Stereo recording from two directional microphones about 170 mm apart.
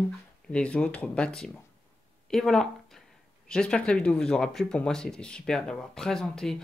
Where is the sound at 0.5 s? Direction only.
5° left (ahead or behind).